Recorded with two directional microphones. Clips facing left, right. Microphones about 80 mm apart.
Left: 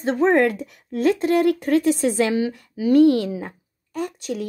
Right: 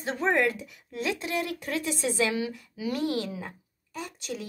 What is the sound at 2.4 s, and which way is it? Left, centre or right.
Speech, left.